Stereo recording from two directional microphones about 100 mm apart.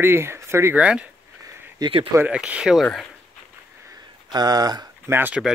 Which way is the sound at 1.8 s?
45° right (ahead or behind).